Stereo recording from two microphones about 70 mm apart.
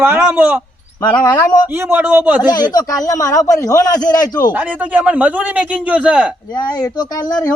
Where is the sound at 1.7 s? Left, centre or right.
Right.